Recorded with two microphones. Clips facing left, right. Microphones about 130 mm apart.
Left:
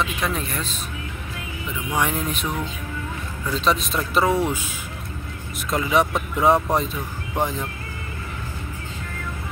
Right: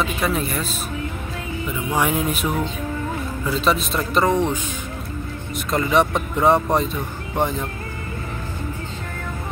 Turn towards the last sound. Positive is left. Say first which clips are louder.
# right 2 dB
turn(degrees=0)  # may be behind; listen again after turning